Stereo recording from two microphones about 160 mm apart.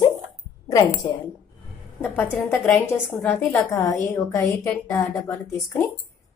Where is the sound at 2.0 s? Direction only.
15° left (ahead or behind).